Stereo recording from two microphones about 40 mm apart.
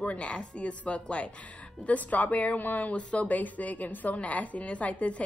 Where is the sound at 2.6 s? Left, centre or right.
Left.